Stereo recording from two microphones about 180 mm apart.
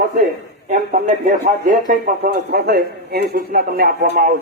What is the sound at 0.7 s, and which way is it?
Speech, 45° right (ahead or behind).